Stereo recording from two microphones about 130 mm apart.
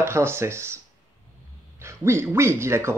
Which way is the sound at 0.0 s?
20° right (ahead or behind).